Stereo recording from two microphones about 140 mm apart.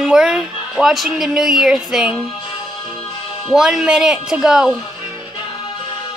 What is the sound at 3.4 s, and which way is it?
A woman's voice, centre (ahead or behind).